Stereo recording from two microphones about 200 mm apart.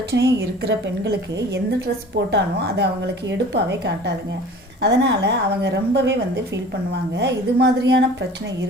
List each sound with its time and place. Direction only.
0.1 s a woman's voice: 60° right (ahead or behind)
2.3 s a woman's voice: 60° right (ahead or behind)